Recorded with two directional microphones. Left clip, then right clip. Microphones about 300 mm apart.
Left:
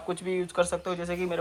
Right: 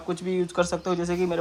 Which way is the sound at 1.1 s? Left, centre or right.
Centre.